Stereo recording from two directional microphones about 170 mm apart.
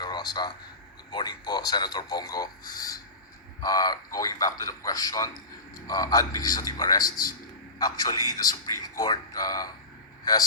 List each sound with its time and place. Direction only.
0.0 s a sound: 25° left (ahead or behind)
1.1 s a man's voice: 25° left (ahead or behind)
3.6 s a man's voice: 20° left (ahead or behind)
7.0 s a man's voice: 55° left (ahead or behind)
7.8 s a man's voice: 25° left (ahead or behind)